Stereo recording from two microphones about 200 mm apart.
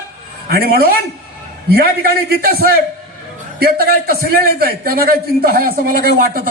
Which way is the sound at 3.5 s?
50° right (ahead or behind).